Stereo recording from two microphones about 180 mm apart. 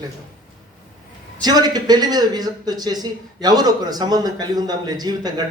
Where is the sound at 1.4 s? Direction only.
20° right (ahead or behind).